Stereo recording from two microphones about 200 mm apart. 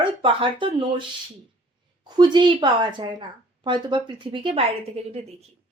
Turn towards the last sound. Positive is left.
turn(degrees=-30)  # may be behind; listen again after turning